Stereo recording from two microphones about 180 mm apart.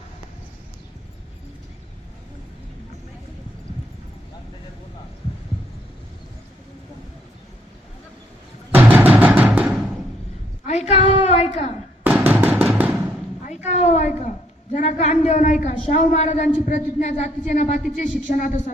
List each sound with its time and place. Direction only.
8.7 s music: 10° right (ahead or behind)
10.7 s a sound: 40° left (ahead or behind)
12.0 s music: 10° right (ahead or behind)
13.7 s a man's voice: 40° left (ahead or behind)